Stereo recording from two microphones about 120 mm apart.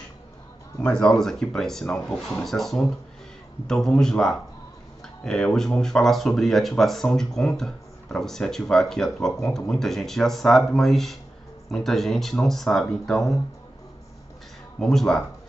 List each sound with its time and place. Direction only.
0.7 s speech: 5° left (ahead or behind)
14.8 s speech: 5° left (ahead or behind)